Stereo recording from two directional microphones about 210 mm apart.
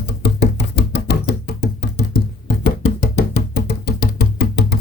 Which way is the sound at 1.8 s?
50° left (ahead or behind).